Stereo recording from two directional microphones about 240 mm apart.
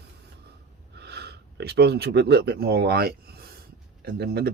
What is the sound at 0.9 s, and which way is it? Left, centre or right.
Speech, right.